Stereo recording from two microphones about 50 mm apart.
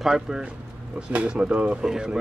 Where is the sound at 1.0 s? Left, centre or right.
Right.